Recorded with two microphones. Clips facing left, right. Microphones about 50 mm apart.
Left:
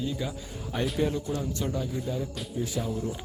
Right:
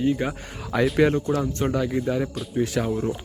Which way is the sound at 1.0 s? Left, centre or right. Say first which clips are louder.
Right 9 dB; right.